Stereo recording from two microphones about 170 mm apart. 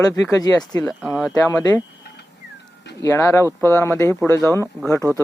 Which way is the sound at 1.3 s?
20° left (ahead or behind).